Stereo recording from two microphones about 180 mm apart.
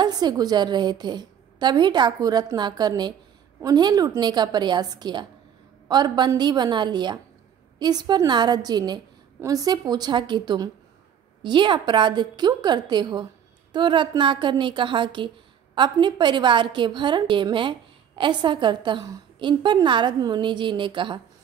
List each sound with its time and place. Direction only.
0.0 s a woman's voice: 25° right (ahead or behind)